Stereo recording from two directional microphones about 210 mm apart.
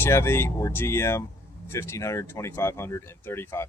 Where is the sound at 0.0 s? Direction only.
10° left (ahead or behind).